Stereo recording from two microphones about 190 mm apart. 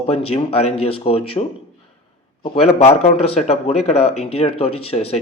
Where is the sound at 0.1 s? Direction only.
30° left (ahead or behind).